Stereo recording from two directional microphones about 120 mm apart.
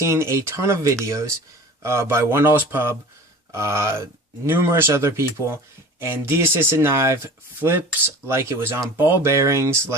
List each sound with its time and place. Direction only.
0.0 s speech: 25° right (ahead or behind)